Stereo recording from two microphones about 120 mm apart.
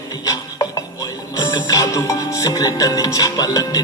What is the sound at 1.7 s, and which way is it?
Music, 30° left (ahead or behind).